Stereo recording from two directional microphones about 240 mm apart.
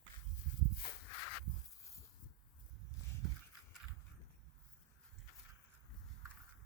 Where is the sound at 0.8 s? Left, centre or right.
Left.